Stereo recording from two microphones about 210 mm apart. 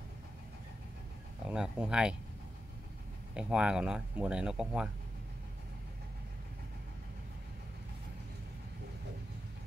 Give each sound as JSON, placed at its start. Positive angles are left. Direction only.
{"t": 1.5, "sound": "speech", "side_deg": -5}
{"t": 3.3, "sound": "speech", "side_deg": -5}